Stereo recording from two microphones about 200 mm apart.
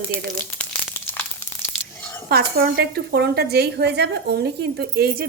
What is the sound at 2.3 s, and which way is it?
A woman's voice, 50° right (ahead or behind).